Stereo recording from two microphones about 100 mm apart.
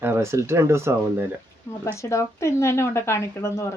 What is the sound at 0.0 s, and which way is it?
Speech, 25° right (ahead or behind).